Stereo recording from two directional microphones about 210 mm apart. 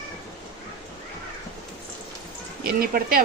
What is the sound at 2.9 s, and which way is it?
Speech, 45° right (ahead or behind).